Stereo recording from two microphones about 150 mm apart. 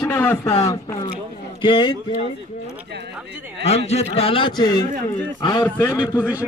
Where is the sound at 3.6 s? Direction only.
45° left (ahead or behind); by 5.6 s 30° left (ahead or behind).